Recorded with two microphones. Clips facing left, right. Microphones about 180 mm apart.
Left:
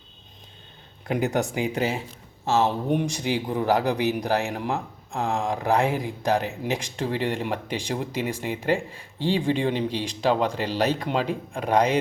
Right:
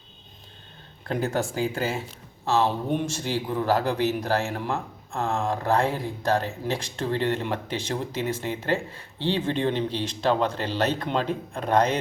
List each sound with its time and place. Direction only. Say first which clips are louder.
1.0 s speech: left 2 dB; 15° left (ahead or behind)